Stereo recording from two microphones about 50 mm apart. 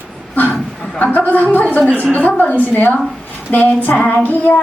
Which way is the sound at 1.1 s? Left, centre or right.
Left.